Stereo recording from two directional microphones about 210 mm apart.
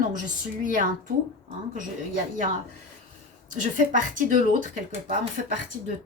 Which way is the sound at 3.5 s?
40° right (ahead or behind).